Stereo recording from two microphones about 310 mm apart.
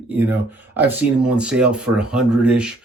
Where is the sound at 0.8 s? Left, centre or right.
Centre.